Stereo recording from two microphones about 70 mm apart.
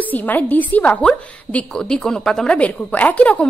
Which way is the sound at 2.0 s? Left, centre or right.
Centre.